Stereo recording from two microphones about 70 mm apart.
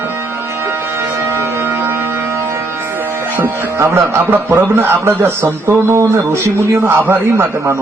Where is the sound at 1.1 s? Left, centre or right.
Right.